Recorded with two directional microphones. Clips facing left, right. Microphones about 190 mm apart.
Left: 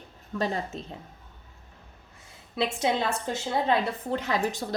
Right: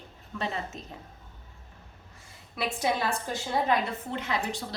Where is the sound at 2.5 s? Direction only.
25° left (ahead or behind).